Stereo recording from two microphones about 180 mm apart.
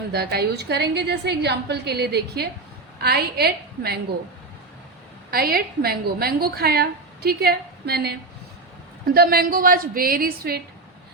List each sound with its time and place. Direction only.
0.1 s a woman's voice: 65° right (ahead or behind)
5.3 s a woman's voice: 55° right (ahead or behind)